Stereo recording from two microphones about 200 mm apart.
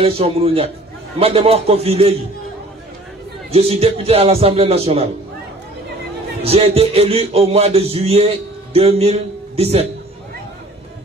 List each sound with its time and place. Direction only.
0.0 s speech: 30° right (ahead or behind)
3.5 s speech: 30° right (ahead or behind)
6.4 s speech: 30° right (ahead or behind)